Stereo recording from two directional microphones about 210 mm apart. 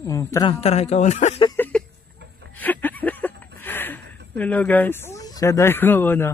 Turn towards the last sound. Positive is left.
turn(degrees=10)  # may be behind; listen again after turning